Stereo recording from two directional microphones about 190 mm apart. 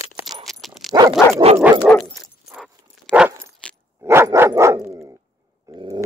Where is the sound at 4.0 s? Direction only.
15° right (ahead or behind).